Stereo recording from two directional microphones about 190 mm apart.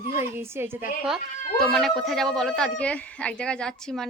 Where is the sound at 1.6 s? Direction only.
Centre (ahead or behind).